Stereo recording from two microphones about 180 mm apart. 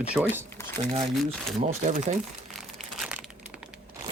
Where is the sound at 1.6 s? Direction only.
40° right (ahead or behind).